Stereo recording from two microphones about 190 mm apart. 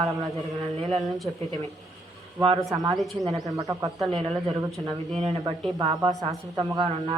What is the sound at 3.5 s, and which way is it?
Speech, 20° right (ahead or behind).